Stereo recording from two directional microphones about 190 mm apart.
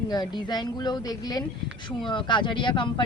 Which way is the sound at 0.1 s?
20° left (ahead or behind).